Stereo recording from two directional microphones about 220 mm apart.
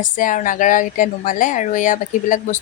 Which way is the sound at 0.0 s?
35° left (ahead or behind).